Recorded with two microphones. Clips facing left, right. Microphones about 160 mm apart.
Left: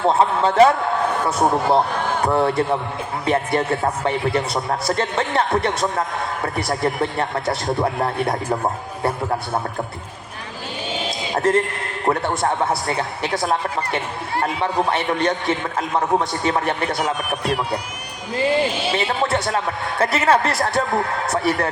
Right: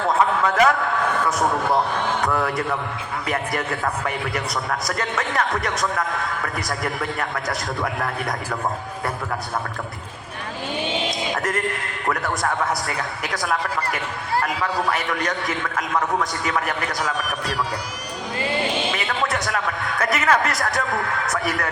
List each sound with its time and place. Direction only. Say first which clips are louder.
0.0 s a man's voice: left 3 dB; 30° left (ahead or behind)
11.3 s a man's voice: left 6 dB; 30° left (ahead or behind)
18.9 s a man's voice: left 4 dB; 30° left (ahead or behind)